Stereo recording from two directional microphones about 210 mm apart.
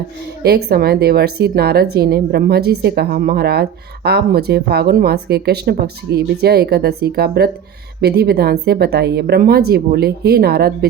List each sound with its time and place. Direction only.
0.4 s speech: 50° right (ahead or behind)